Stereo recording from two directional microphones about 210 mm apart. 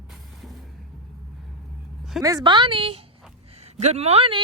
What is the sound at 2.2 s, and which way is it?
A woman's voice, 20° right (ahead or behind).